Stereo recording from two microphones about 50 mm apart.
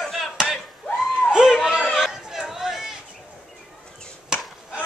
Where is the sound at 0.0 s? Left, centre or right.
Centre.